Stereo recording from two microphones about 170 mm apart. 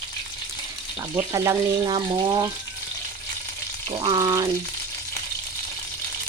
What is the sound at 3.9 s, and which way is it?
Speech, 25° right (ahead or behind).